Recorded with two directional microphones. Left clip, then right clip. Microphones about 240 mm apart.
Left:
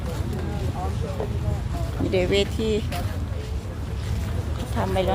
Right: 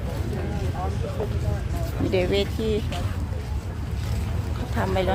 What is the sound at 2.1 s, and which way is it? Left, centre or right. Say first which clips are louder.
Speech: left 2 dB; centre.